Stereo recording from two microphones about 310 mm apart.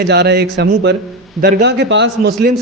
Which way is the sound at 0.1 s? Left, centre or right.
Right.